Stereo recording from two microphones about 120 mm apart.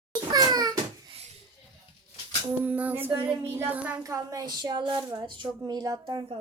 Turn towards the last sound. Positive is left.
turn(degrees=-35)  # may be behind; listen again after turning